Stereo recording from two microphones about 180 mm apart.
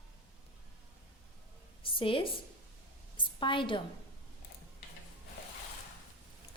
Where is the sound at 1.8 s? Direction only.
30° left (ahead or behind).